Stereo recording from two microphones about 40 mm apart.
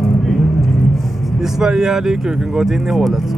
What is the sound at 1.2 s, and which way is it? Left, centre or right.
Speech, centre.